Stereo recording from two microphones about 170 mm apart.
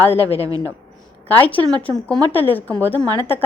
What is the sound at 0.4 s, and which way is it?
Speech, 20° right (ahead or behind).